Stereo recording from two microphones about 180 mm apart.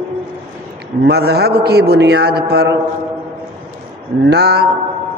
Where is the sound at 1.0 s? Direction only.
65° right (ahead or behind).